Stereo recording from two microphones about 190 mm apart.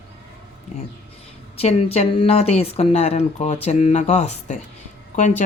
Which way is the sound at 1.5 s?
35° left (ahead or behind).